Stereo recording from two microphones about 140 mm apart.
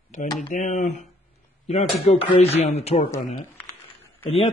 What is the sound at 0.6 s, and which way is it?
Speech, 60° left (ahead or behind).